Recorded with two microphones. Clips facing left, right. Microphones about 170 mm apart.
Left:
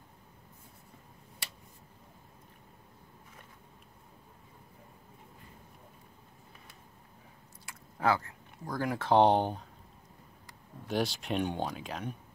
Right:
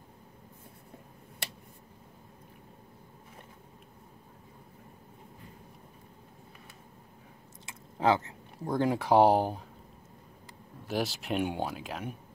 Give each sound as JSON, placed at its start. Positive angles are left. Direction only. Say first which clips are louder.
{"t": 7.6, "sound": "a sound", "louder": "right 3 dB", "side_deg": -20}
{"t": 9.0, "sound": "speech", "louder": "right 1 dB", "side_deg": -10}
{"t": 10.9, "sound": "speech", "louder": "even", "side_deg": 0}